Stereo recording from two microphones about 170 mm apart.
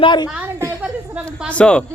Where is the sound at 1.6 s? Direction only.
5° left (ahead or behind).